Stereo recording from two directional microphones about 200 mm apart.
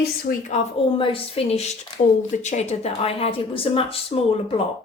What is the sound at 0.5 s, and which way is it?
A woman's voice, 25° left (ahead or behind).